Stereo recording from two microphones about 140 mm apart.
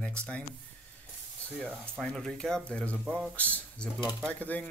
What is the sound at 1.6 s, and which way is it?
Speech, centre (ahead or behind).